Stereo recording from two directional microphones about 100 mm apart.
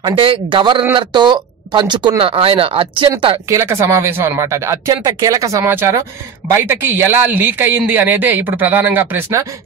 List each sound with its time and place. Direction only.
0.0 s speech: 60° right (ahead or behind)
3.4 s speech: 30° right (ahead or behind)
4.8 s speech: 45° right (ahead or behind); by 9.2 s 20° right (ahead or behind)